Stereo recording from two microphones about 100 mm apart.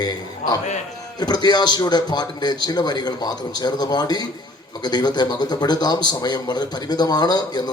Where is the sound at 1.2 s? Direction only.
45° left (ahead or behind).